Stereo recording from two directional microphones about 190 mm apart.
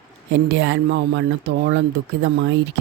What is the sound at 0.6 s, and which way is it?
Speech, 70° right (ahead or behind).